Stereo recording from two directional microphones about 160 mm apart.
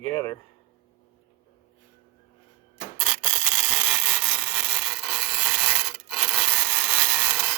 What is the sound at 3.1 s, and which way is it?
Rub, 5° right (ahead or behind).